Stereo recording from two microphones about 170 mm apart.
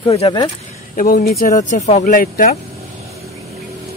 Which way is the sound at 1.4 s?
45° left (ahead or behind).